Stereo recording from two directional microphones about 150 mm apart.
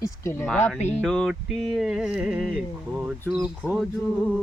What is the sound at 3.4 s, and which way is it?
Speech, 10° right (ahead or behind).